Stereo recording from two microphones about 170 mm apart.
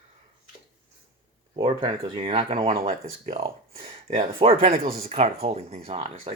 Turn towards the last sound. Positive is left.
turn(degrees=-35)  # may be behind; listen again after turning